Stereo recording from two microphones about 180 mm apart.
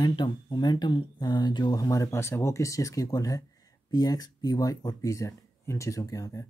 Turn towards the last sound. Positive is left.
turn(degrees=20)  # may be behind; listen again after turning